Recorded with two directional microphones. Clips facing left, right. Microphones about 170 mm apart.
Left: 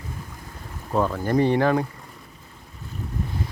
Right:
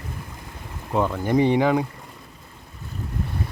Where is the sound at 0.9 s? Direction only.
15° right (ahead or behind).